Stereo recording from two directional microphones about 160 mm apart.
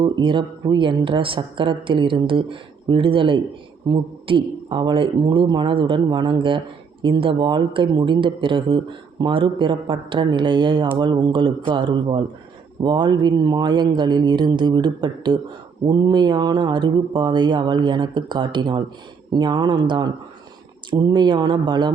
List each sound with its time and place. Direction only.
0.0 s a woman's voice: 30° right (ahead or behind)